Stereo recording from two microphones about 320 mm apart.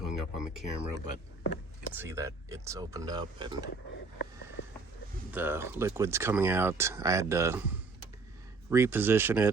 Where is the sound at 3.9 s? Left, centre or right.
Left.